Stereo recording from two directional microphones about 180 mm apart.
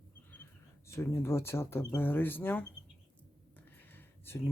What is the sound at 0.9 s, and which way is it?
Speech, 15° left (ahead or behind).